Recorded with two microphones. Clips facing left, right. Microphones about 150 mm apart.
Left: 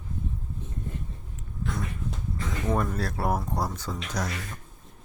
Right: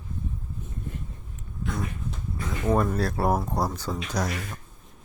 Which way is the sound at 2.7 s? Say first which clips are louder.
Right 5 dB; 35° right (ahead or behind).